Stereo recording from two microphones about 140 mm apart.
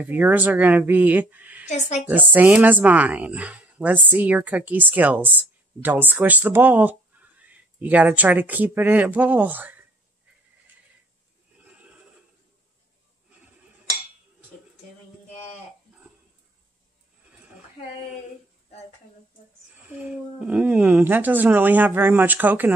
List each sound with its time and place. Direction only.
0.0 s speech: 15° right (ahead or behind)
1.7 s a woman's voice: 55° left (ahead or behind)
2.0 s speech: 10° right (ahead or behind)
19.9 s speech: 10° right (ahead or behind)